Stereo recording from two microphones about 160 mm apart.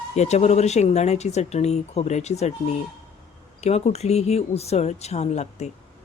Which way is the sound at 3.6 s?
40° left (ahead or behind).